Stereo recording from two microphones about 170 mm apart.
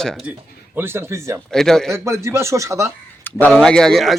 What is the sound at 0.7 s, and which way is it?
Speech, 15° right (ahead or behind).